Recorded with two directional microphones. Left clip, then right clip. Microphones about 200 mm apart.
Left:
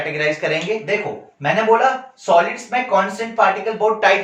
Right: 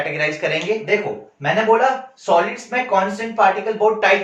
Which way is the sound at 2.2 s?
15° right (ahead or behind).